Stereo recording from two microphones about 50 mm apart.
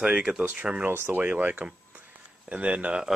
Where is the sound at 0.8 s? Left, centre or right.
Right.